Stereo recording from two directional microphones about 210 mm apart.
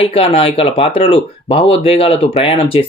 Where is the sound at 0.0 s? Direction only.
25° left (ahead or behind).